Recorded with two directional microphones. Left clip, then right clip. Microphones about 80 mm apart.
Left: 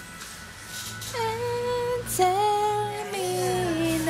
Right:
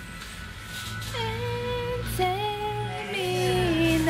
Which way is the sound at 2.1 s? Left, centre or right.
Left.